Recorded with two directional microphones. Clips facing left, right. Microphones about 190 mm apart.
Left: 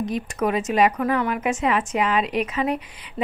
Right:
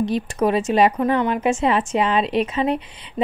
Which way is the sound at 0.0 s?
30° right (ahead or behind).